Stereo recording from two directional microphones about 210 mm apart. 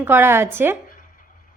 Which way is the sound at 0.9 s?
40° left (ahead or behind).